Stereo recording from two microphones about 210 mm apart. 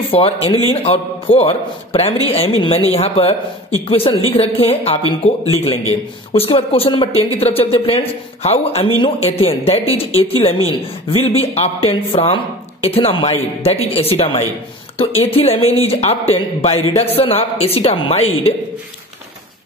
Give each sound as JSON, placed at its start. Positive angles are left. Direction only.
{"t": 0.1, "sound": "speech", "side_deg": 25}